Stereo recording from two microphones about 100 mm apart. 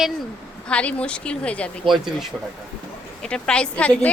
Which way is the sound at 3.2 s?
10° left (ahead or behind).